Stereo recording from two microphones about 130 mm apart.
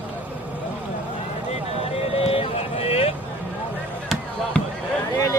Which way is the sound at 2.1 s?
45° left (ahead or behind).